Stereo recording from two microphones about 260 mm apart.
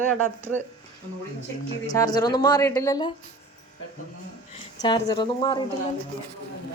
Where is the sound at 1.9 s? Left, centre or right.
Centre.